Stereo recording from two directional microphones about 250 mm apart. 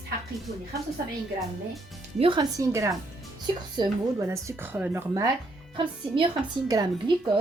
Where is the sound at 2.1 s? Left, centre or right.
Centre.